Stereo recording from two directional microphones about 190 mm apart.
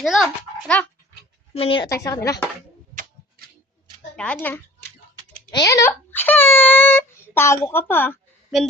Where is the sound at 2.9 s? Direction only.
40° right (ahead or behind).